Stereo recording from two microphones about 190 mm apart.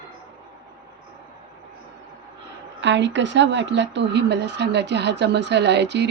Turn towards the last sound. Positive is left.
turn(degrees=-65)  # may be behind; listen again after turning